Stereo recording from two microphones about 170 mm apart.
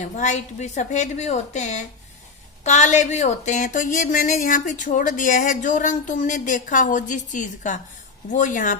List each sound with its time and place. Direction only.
0.2 s speech: 45° left (ahead or behind)